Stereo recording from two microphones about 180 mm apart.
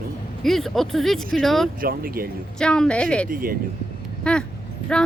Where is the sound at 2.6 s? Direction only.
5° left (ahead or behind).